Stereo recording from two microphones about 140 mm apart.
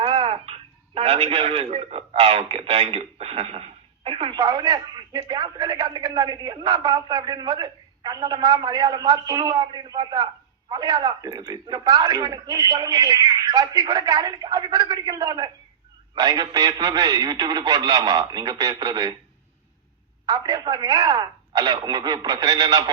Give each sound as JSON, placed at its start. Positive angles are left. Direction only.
{"t": 0.0, "sound": "a man's voice", "side_deg": -40}
{"t": 20.2, "sound": "a man's voice", "side_deg": -30}